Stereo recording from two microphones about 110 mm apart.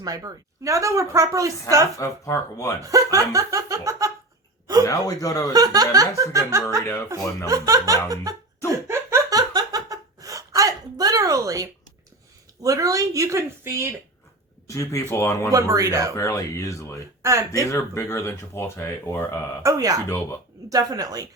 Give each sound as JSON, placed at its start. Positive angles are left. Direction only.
{"t": 0.0, "sound": "a woman's voice", "side_deg": -35}
{"t": 2.0, "sound": "speech", "side_deg": 30}
{"t": 2.8, "sound": "a woman's voice", "side_deg": -30}
{"t": 4.9, "sound": "speech", "side_deg": 35}
{"t": 5.5, "sound": "laughter", "side_deg": -35}
{"t": 9.5, "sound": "a sound", "side_deg": -35}
{"t": 12.6, "sound": "laughter", "side_deg": -30}
{"t": 14.7, "sound": "speech", "side_deg": 30}
{"t": 15.5, "sound": "laughter", "side_deg": -30}
{"t": 16.1, "sound": "speech", "side_deg": 30}
{"t": 17.2, "sound": "a woman's voice", "side_deg": -25}
{"t": 17.7, "sound": "speech", "side_deg": 25}
{"t": 19.6, "sound": "laughter", "side_deg": -30}